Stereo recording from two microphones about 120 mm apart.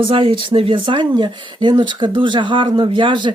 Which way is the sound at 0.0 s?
50° right (ahead or behind).